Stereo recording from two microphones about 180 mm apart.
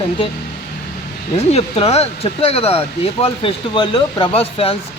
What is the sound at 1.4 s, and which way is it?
Speech, 35° left (ahead or behind).